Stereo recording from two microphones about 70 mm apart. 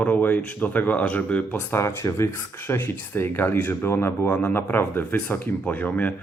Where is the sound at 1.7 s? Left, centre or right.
Left.